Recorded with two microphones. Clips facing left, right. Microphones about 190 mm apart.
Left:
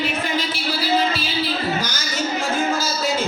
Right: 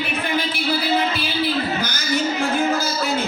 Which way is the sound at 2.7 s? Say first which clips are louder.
Right 1 dB; 60° right (ahead or behind).